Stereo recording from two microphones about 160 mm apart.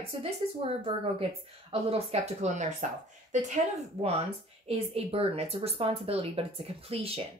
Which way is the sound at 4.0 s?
35° right (ahead or behind).